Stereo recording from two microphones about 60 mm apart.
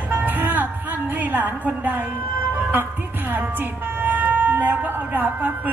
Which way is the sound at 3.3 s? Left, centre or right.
Right.